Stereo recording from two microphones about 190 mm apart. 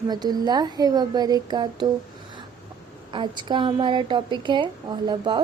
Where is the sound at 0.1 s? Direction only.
20° right (ahead or behind).